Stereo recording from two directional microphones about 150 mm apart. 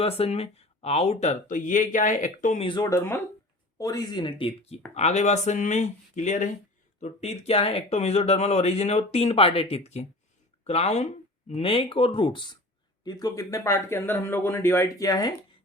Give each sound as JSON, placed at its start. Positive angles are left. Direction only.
{"t": 0.0, "sound": "speech", "side_deg": 40}
{"t": 2.6, "sound": "speech", "side_deg": 35}
{"t": 2.8, "sound": "speech", "side_deg": 15}